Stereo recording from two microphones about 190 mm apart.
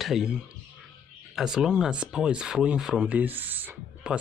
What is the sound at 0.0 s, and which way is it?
Speech, centre (ahead or behind).